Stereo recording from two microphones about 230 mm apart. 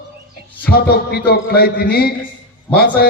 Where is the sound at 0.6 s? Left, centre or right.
Left.